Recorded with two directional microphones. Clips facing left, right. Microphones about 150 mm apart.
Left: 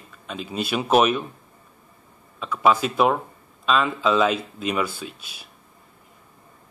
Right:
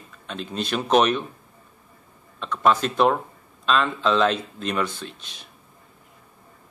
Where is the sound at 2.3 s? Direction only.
5° left (ahead or behind).